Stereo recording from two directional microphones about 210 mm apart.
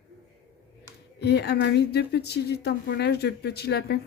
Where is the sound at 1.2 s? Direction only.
50° left (ahead or behind).